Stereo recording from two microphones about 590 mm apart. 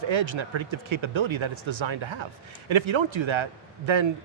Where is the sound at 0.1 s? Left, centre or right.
Right.